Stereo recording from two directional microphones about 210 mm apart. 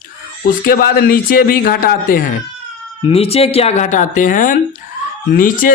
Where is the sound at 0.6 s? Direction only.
45° left (ahead or behind).